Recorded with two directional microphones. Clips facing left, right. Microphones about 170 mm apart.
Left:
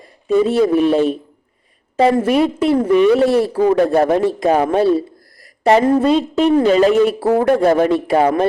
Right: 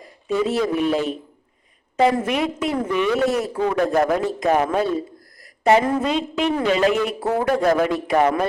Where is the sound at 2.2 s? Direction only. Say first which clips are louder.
Left 8 dB; 35° left (ahead or behind).